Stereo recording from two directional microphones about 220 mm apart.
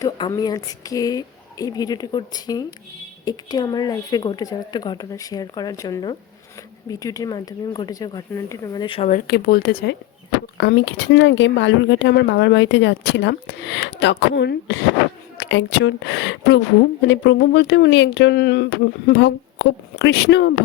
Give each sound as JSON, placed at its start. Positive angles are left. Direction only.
{"t": 0.0, "sound": "a woman's voice", "side_deg": 15}